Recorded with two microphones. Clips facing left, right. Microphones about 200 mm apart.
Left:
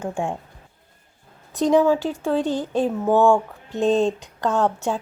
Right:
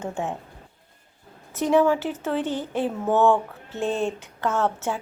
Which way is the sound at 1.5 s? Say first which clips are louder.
Left 2 dB; 15° left (ahead or behind).